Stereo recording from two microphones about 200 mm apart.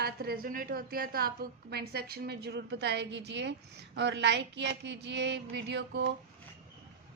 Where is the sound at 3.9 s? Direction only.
60° right (ahead or behind).